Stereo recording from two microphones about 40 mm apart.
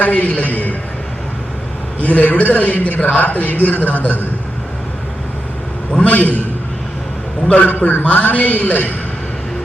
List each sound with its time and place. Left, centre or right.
0.0 s a man's voice: left
2.0 s a man's voice: left
6.0 s a man's voice: left
7.7 s a man's voice: left